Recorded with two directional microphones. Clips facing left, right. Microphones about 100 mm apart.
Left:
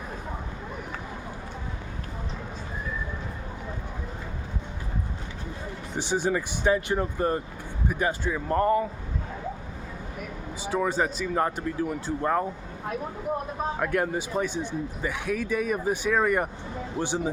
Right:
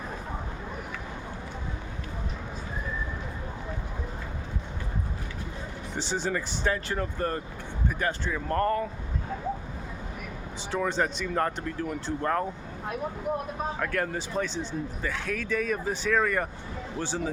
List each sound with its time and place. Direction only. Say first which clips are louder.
6.0 s speech: left 4 dB; 15° left (ahead or behind)
10.7 s speech: left 2 dB; 10° left (ahead or behind)
13.7 s speech: left 5 dB; 15° left (ahead or behind)